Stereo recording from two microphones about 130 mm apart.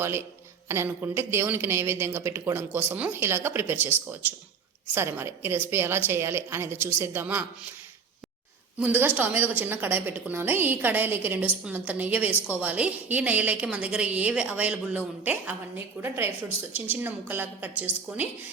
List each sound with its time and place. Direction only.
0.0 s speech: 20° right (ahead or behind)
8.8 s a woman's voice: 15° right (ahead or behind)